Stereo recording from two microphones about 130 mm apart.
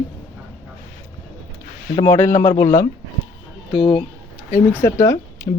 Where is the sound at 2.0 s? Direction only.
20° left (ahead or behind).